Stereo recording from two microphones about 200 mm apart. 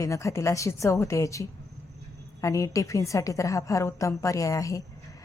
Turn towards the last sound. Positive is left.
turn(degrees=15)  # may be behind; listen again after turning